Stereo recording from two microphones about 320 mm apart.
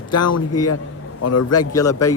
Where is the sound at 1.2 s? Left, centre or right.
Left.